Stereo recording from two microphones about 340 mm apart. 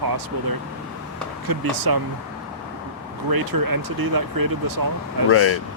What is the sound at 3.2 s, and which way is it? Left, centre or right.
Speech, right.